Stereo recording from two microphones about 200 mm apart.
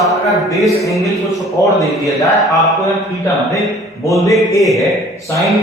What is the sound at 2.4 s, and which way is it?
Speech, centre (ahead or behind).